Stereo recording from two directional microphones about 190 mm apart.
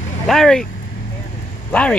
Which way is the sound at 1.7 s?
5° left (ahead or behind).